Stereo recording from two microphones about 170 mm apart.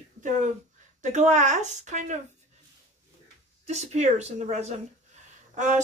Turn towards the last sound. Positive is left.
turn(degrees=-45)  # may be behind; listen again after turning